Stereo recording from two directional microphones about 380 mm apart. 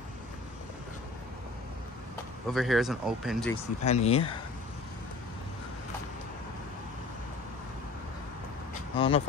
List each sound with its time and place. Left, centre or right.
2.5 s speech: centre
3.8 s speech: centre
8.9 s speech: centre